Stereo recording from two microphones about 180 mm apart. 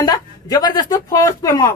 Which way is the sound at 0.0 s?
20° left (ahead or behind).